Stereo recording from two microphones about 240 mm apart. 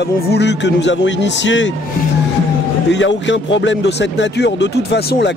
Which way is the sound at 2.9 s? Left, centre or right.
Left.